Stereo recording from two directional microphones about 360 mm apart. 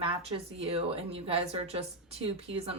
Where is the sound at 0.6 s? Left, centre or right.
Centre.